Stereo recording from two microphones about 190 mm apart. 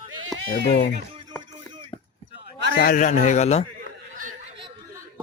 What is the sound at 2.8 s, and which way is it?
Speech, 45° left (ahead or behind).